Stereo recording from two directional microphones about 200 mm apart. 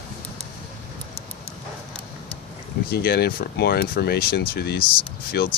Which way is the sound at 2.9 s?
50° left (ahead or behind).